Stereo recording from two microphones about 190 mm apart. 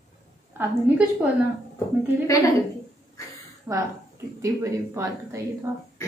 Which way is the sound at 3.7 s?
10° right (ahead or behind).